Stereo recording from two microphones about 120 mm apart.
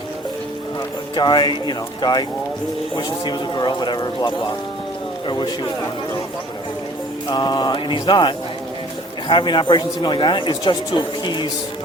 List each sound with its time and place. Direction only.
1.1 s speech: 40° left (ahead or behind)
7.3 s speech: 35° left (ahead or behind)